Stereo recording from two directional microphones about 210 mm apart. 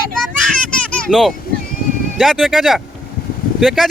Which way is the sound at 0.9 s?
Centre (ahead or behind).